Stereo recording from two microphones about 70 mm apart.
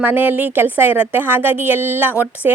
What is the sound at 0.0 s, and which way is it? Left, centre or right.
A woman's voice, right.